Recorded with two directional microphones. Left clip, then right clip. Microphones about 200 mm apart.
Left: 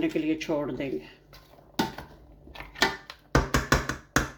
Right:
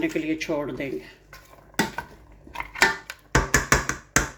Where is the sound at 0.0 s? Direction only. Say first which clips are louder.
Right 2 dB; centre (ahead or behind).